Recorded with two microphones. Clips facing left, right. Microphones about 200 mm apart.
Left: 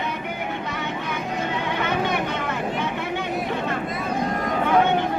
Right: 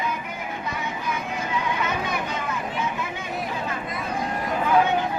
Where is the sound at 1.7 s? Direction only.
65° left (ahead or behind).